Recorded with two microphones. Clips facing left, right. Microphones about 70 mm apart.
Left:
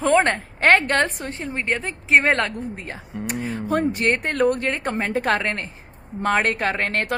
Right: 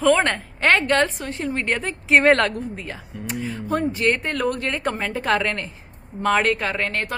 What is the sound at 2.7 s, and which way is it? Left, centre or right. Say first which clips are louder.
Speech: right 1 dB; left.